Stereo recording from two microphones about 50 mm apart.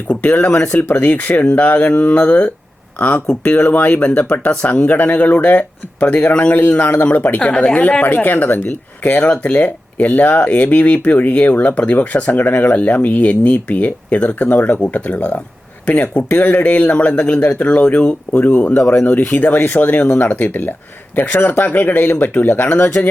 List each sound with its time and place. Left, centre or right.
0.3 s speech: left
8.0 s speech: left